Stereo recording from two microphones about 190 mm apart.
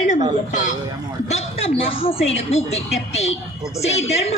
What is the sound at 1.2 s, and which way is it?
A woman's voice, 30° left (ahead or behind).